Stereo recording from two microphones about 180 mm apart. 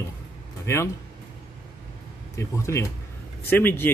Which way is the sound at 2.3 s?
15° left (ahead or behind).